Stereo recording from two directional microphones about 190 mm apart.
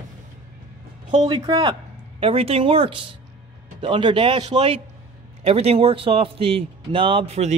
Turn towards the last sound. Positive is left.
turn(degrees=-35)  # may be behind; listen again after turning